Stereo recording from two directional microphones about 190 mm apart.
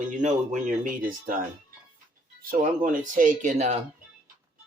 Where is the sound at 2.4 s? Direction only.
45° right (ahead or behind).